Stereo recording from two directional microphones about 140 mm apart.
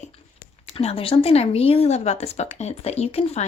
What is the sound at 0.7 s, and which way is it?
Speech, 45° left (ahead or behind).